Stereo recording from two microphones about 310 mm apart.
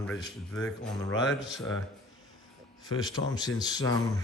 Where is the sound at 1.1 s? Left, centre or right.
Left.